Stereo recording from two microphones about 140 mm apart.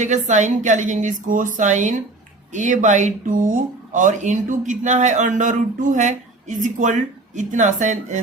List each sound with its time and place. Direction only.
0.0 s speech: 60° right (ahead or behind)